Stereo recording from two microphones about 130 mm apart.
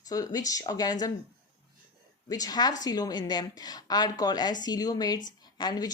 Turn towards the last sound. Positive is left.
turn(degrees=30)  # may be behind; listen again after turning